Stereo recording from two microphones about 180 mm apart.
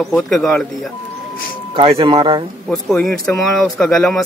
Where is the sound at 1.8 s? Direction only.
30° right (ahead or behind).